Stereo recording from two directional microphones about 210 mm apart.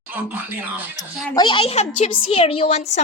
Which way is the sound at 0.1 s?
10° right (ahead or behind).